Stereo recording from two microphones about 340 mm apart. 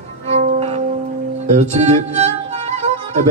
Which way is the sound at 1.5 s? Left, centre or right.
Centre.